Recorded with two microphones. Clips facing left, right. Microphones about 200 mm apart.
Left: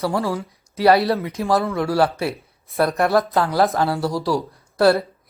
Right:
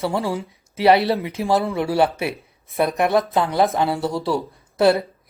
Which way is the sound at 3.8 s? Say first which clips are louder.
Even; 20° right (ahead or behind).